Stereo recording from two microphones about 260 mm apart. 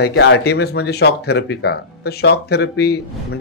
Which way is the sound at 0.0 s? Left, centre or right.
Left.